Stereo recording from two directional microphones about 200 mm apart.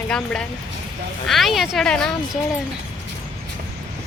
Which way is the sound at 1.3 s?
Centre (ahead or behind).